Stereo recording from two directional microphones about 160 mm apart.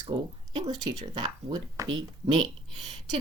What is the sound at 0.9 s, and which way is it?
Speech, 25° right (ahead or behind).